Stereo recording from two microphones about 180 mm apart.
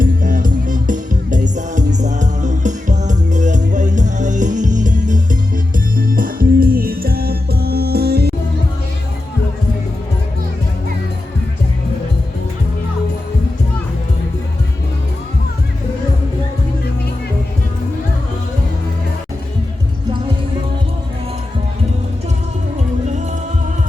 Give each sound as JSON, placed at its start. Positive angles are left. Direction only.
{"t": 0.0, "sound": "music", "side_deg": -50}